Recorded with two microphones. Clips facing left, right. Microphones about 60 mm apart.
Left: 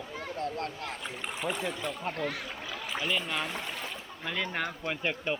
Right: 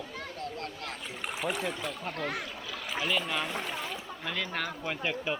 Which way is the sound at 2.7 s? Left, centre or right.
Centre.